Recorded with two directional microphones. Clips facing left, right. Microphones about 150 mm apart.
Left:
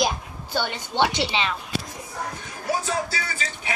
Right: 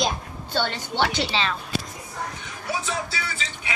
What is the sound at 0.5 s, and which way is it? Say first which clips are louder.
A woman's voice: left 1 dB; 15° left (ahead or behind).